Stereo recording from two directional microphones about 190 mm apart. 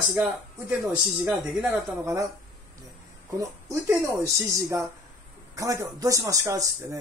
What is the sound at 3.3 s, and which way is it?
Speech, 15° right (ahead or behind).